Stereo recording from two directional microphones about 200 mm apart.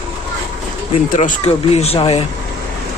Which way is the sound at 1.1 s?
40° left (ahead or behind).